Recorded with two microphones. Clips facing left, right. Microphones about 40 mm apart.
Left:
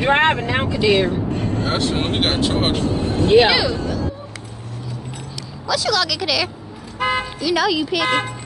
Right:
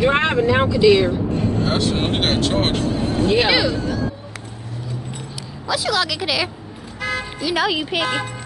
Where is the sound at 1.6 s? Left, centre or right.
Centre.